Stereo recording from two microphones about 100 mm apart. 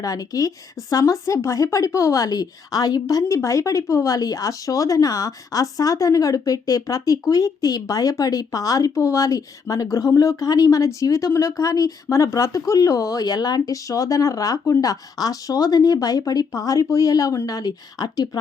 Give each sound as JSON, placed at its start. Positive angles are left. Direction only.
{"t": 0.0, "sound": "speech", "side_deg": 35}